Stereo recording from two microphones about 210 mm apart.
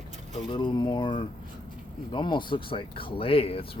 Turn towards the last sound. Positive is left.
turn(degrees=25)  # may be behind; listen again after turning